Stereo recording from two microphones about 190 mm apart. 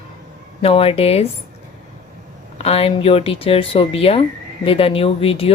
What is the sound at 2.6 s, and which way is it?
Speech, 30° left (ahead or behind).